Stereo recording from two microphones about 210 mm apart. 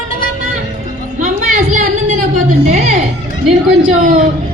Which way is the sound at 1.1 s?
40° right (ahead or behind).